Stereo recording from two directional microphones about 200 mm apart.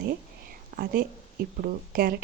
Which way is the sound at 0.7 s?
45° right (ahead or behind).